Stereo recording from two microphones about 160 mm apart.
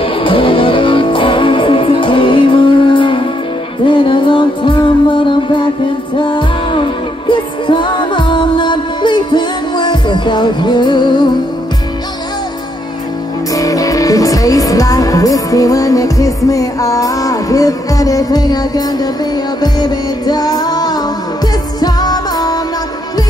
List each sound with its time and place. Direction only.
0.0 s music: 35° left (ahead or behind)
13.6 s music: 20° left (ahead or behind)